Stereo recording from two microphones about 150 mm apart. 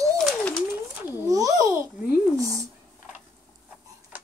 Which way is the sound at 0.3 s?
5° left (ahead or behind).